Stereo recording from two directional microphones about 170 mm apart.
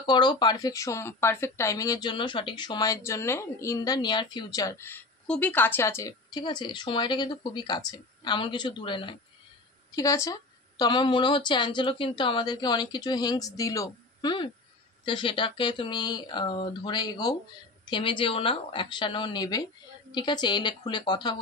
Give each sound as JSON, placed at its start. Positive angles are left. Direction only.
{"t": 0.0, "sound": "speech", "side_deg": 25}